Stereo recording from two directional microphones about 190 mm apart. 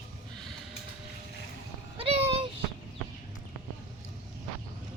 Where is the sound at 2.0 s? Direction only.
30° right (ahead or behind).